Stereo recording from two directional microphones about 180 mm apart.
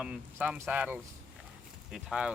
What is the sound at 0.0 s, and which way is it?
Speech, 10° right (ahead or behind).